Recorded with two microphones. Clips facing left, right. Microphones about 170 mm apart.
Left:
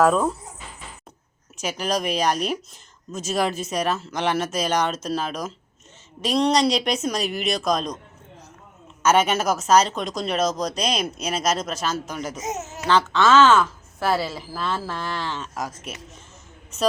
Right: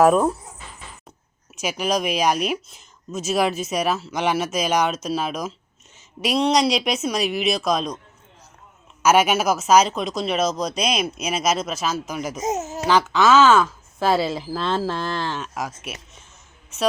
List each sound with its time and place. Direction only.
0.0 s speech: 10° right (ahead or behind)
1.6 s speech: 5° right (ahead or behind)
9.0 s speech: 10° right (ahead or behind)
12.4 s speech: 35° right (ahead or behind)
12.9 s speech: 10° right (ahead or behind)
14.3 s speech: 25° right (ahead or behind)
15.3 s speech: 10° right (ahead or behind)